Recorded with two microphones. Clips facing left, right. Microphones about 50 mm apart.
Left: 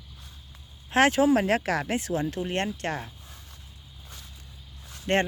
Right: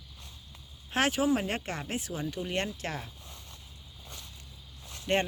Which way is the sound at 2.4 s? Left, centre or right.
Left.